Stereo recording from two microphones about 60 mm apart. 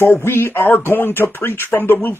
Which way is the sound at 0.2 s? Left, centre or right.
Left.